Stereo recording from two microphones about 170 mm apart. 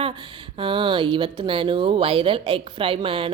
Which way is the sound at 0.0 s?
30° right (ahead or behind).